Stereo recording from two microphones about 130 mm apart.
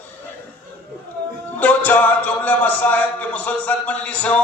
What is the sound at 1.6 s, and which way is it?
Speech, 10° left (ahead or behind).